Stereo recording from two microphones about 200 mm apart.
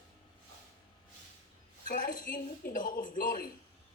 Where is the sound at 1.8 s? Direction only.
40° left (ahead or behind).